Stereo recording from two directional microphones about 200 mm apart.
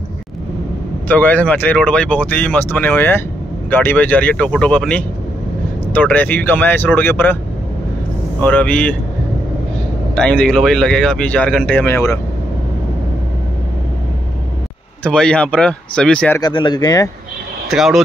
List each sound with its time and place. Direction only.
1.0 s speech: 10° left (ahead or behind)
8.4 s speech: 10° left (ahead or behind)
10.1 s speech: 5° left (ahead or behind)
15.0 s speech: 5° left (ahead or behind)
16.3 s speech: 20° left (ahead or behind)
17.6 s speech: centre (ahead or behind)